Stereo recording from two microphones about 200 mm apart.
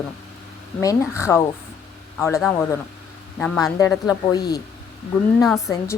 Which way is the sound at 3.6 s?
15° left (ahead or behind).